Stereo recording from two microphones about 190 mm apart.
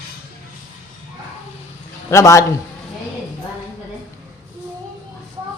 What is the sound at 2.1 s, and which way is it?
Speech, 15° left (ahead or behind).